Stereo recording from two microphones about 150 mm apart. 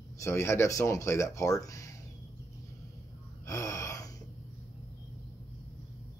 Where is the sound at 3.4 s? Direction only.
20° left (ahead or behind).